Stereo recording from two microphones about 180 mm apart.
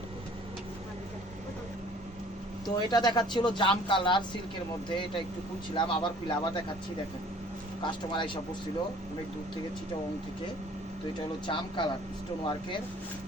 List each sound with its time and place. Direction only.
2.6 s speech: 25° left (ahead or behind)
5.7 s speech: 25° left (ahead or behind)
7.8 s speech: 25° left (ahead or behind)
11.4 s speech: 25° left (ahead or behind)